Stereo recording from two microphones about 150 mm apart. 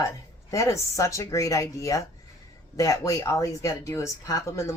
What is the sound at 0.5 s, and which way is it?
Speech, 20° left (ahead or behind).